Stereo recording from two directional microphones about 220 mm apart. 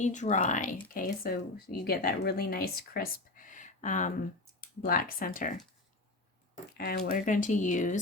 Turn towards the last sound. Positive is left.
turn(degrees=35)  # may be behind; listen again after turning